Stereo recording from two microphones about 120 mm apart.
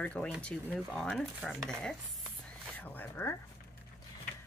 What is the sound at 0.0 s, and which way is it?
Speech, 10° left (ahead or behind).